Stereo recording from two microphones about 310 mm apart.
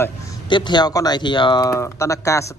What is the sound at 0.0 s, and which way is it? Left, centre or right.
Speech, centre.